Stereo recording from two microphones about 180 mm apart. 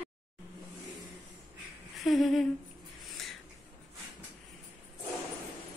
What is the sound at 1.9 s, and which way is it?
Humming, centre (ahead or behind).